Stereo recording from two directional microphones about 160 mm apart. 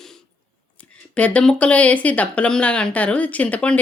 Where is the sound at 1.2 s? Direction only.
10° left (ahead or behind).